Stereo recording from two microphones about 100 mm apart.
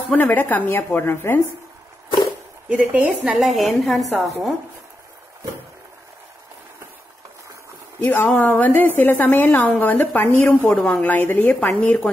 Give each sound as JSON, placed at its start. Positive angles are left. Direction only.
{"t": 0.1, "sound": "a woman's voice", "side_deg": 15}
{"t": 2.7, "sound": "speech", "side_deg": -15}
{"t": 3.2, "sound": "a woman's voice", "side_deg": 0}
{"t": 8.0, "sound": "a woman's voice", "side_deg": 20}